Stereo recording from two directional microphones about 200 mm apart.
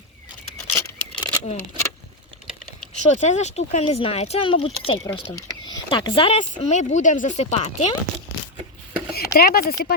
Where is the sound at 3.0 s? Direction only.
35° left (ahead or behind).